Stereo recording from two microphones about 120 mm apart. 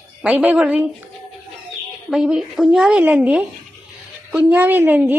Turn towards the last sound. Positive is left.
turn(degrees=-15)  # may be behind; listen again after turning